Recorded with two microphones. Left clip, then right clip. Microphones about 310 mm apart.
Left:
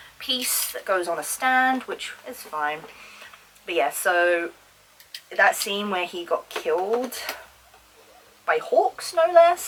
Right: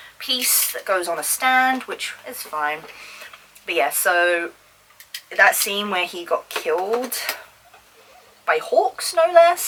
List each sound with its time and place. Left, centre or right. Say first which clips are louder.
0.2 s speech: right 4 dB; centre
8.6 s a woman's voice: right 1 dB; centre
9.0 s speech: right 3 dB; centre